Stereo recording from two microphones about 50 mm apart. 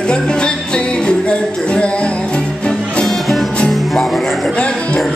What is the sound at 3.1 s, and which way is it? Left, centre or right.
Music, centre.